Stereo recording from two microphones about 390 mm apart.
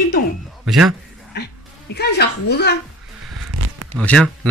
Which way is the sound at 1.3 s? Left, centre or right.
Left.